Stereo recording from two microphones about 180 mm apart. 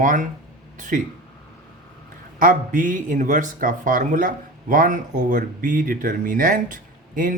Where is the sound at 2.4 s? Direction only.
45° right (ahead or behind).